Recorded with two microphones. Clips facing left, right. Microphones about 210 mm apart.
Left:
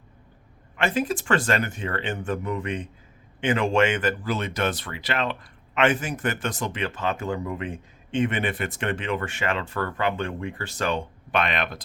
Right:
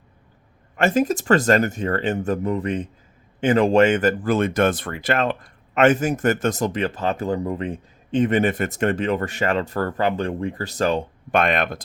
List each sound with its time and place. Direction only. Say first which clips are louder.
0.8 s speech: right 6 dB; 45° right (ahead or behind)